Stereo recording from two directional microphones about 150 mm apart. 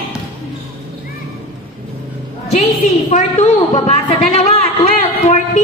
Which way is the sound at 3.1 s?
50° left (ahead or behind).